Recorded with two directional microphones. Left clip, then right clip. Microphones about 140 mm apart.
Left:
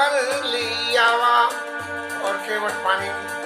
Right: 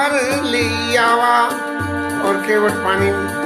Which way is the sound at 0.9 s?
20° right (ahead or behind).